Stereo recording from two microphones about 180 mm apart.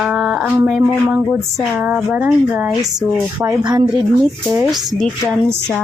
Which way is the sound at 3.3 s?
25° right (ahead or behind).